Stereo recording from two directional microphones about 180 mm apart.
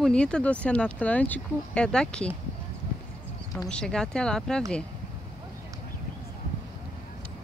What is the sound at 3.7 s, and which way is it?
Speech, 5° left (ahead or behind).